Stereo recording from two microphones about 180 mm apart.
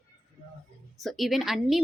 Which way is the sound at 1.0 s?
Centre (ahead or behind).